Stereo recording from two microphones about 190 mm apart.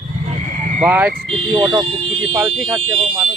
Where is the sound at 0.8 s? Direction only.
10° right (ahead or behind).